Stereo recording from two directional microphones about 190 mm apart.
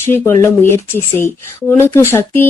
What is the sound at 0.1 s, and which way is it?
Speech, 10° left (ahead or behind).